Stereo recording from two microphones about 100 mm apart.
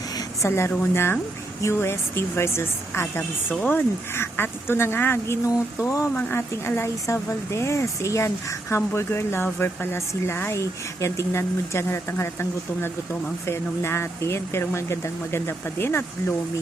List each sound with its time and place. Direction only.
0.4 s speech: 25° left (ahead or behind)